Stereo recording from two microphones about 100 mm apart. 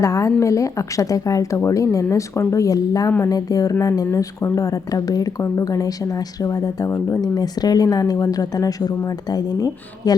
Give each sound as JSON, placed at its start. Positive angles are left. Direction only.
{"t": 0.0, "sound": "a woman's voice", "side_deg": 35}